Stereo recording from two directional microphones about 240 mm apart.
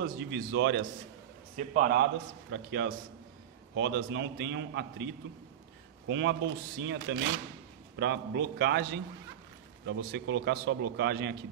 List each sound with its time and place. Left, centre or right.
0.0 s a man's voice: right
1.6 s a man's voice: right
2.5 s a man's voice: right